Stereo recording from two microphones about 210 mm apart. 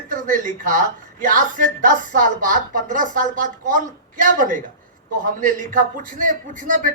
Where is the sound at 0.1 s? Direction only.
40° right (ahead or behind).